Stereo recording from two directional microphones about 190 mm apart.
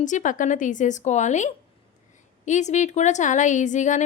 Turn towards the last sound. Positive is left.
turn(degrees=40)  # may be behind; listen again after turning